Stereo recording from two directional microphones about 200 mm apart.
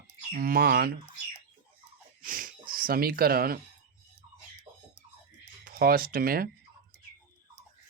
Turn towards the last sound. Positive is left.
turn(degrees=-45)  # may be behind; listen again after turning